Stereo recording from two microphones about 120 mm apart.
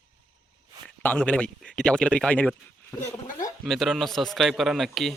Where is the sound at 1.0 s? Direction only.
15° left (ahead or behind).